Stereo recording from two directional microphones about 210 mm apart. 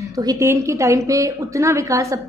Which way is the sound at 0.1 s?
15° right (ahead or behind).